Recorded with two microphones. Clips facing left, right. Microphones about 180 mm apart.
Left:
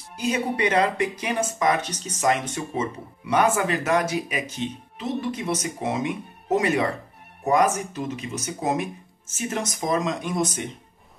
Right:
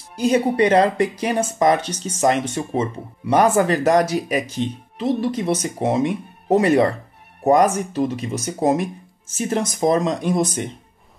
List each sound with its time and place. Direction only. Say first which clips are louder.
0.2 s speech: right 7 dB; 35° right (ahead or behind)